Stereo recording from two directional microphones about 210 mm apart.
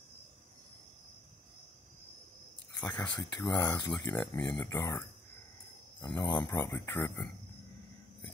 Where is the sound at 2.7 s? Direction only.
5° left (ahead or behind).